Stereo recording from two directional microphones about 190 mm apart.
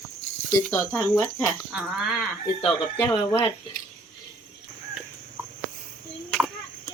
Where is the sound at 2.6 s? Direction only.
25° left (ahead or behind).